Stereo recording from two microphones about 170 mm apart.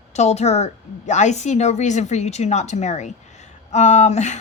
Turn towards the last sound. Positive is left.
turn(degrees=40)  # may be behind; listen again after turning